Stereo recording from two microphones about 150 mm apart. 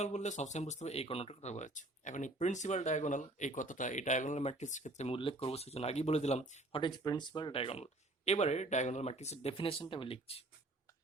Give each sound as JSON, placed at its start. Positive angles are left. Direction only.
{"t": 0.0, "sound": "speech", "side_deg": 50}
{"t": 5.1, "sound": "speech", "side_deg": 40}
{"t": 6.7, "sound": "speech", "side_deg": 30}